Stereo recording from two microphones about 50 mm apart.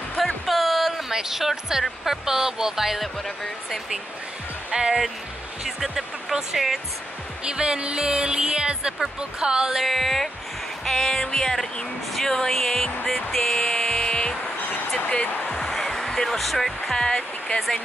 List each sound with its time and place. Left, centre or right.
0.5 s speech: centre
4.6 s music: centre
5.8 s speech: centre
7.4 s music: centre
9.8 s speech: centre
13.3 s music: centre
15.0 s speech: left
15.4 s music: centre
17.0 s speech: centre